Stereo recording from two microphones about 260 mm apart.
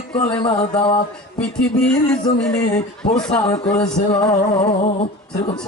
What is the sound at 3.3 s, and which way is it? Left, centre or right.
Speech, centre.